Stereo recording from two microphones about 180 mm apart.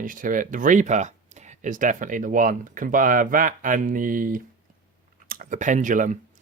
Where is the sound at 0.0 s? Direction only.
50° right (ahead or behind).